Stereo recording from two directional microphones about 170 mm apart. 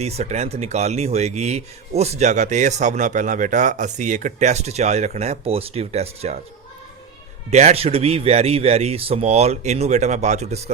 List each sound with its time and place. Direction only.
0.0 s speech: 40° right (ahead or behind)
7.5 s speech: 40° right (ahead or behind)